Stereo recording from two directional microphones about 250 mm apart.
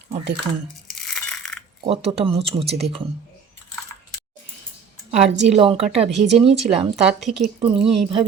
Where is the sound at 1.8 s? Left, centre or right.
Right.